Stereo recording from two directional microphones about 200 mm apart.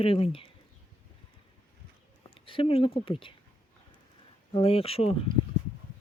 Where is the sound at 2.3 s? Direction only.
25° left (ahead or behind).